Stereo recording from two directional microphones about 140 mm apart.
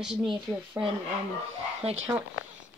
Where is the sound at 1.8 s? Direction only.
50° right (ahead or behind).